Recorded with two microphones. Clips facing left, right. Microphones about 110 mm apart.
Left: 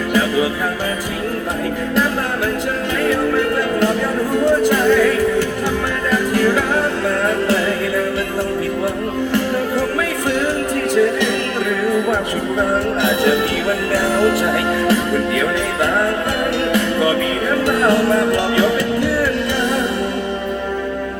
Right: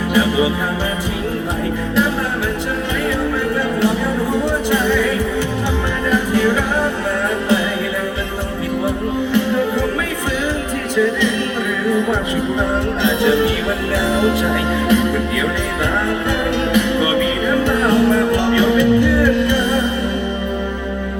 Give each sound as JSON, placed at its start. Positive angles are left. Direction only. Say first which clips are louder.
{"t": 0.1, "sound": "music", "louder": "right 1 dB", "side_deg": -15}
{"t": 6.1, "sound": "music", "louder": "even", "side_deg": -20}
{"t": 14.3, "sound": "music", "louder": "left 1 dB", "side_deg": 65}
{"t": 16.7, "sound": "music", "louder": "even", "side_deg": -15}
{"t": 17.8, "sound": "music", "louder": "even", "side_deg": 70}